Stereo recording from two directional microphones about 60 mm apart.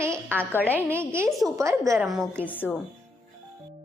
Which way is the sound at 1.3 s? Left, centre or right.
Centre.